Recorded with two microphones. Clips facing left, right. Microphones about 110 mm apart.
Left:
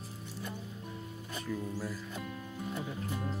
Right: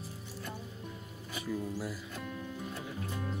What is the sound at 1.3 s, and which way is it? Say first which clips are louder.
Speech: right 1 dB; 10° right (ahead or behind).